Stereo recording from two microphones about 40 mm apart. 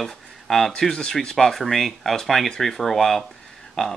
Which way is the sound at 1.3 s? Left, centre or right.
Centre.